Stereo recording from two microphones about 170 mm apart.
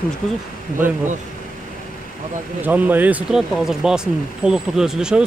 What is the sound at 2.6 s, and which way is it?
Speech, 10° right (ahead or behind).